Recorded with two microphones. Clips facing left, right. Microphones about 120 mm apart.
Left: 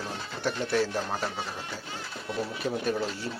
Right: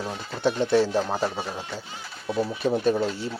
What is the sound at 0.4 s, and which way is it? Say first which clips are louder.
Speech: right 6 dB; 25° right (ahead or behind).